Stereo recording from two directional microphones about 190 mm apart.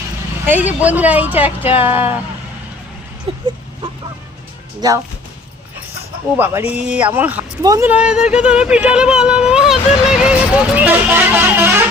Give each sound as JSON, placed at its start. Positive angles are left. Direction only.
{"t": 0.4, "sound": "speech", "side_deg": -10}
{"t": 3.3, "sound": "a sound", "side_deg": -25}
{"t": 4.8, "sound": "speech", "side_deg": -20}
{"t": 6.3, "sound": "speech", "side_deg": -10}